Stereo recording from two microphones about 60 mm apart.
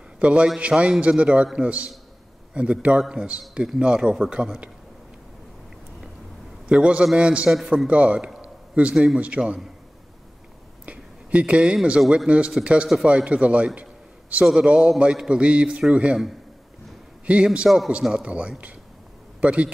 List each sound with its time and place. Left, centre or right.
0.2 s a man's voice: centre
6.7 s a man's voice: centre
10.9 s a man's voice: right
17.3 s a man's voice: centre
17.6 s a man's voice: centre
18.0 s a man's voice: centre